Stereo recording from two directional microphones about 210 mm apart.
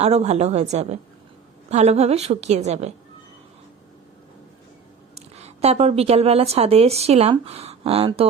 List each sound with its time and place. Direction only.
0.0 s a woman's voice: 30° right (ahead or behind)
5.1 s a woman's voice: 30° right (ahead or behind)